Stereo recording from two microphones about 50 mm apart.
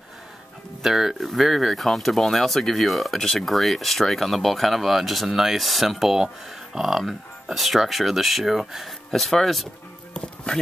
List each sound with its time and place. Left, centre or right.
0.8 s speech: centre
10.1 s music: centre